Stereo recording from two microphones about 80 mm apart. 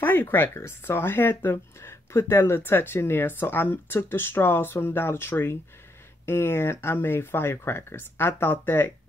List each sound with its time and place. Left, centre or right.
0.0 s speech: left